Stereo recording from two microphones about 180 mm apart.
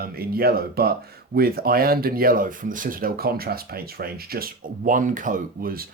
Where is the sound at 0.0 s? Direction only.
55° right (ahead or behind).